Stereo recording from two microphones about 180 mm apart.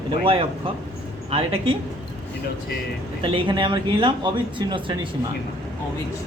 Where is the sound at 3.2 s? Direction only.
30° right (ahead or behind).